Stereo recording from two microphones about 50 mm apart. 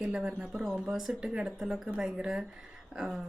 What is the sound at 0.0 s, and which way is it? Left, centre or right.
Speech, centre.